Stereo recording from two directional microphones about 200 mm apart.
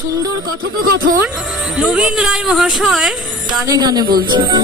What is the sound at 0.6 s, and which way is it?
Speech, 45° right (ahead or behind).